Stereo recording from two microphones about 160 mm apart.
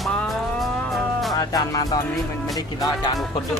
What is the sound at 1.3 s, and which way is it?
Music, 20° left (ahead or behind).